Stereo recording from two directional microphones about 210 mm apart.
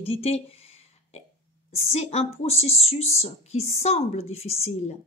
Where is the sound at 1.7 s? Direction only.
30° left (ahead or behind).